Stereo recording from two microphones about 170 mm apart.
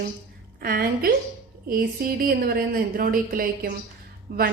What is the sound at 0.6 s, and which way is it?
A woman's voice, 60° right (ahead or behind).